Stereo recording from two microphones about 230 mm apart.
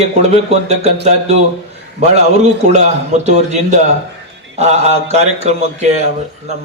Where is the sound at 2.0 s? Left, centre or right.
Right.